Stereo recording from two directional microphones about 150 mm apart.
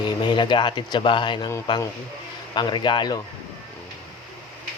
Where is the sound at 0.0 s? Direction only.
30° left (ahead or behind).